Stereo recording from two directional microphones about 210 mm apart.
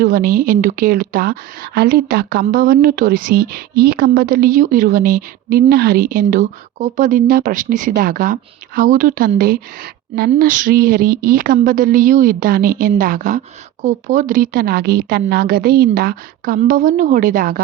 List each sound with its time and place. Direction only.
0.0 s a woman's voice: 40° right (ahead or behind)